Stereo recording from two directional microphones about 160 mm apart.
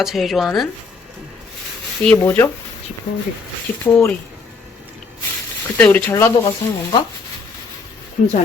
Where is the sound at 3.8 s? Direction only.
15° left (ahead or behind).